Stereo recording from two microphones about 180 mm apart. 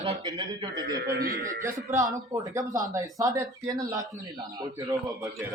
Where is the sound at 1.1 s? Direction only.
55° right (ahead or behind).